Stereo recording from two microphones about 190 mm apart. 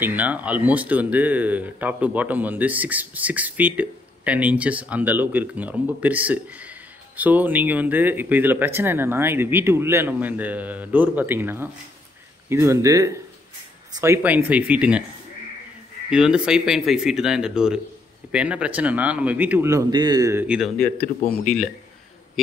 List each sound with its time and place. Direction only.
0.0 s speech: 10° right (ahead or behind)
16.1 s speech: 5° right (ahead or behind)